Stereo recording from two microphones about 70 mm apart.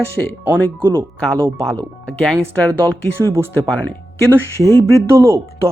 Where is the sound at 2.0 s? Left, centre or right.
Centre.